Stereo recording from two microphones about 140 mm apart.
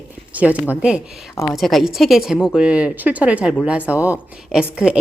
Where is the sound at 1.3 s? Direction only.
20° left (ahead or behind).